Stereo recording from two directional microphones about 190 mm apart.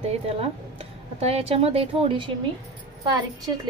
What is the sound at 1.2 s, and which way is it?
A woman's voice, 30° right (ahead or behind).